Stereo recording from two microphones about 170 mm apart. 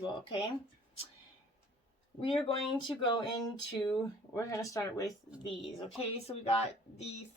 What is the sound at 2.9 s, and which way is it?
Speech, 30° left (ahead or behind).